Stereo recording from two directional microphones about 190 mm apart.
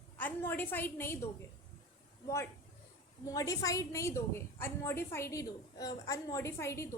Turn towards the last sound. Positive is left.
turn(degrees=15)  # may be behind; listen again after turning